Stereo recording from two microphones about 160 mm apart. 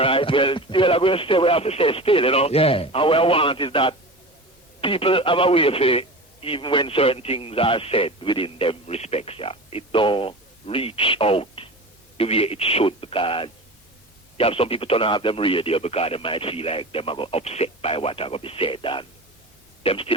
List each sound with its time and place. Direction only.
0.0 s speech: 35° left (ahead or behind)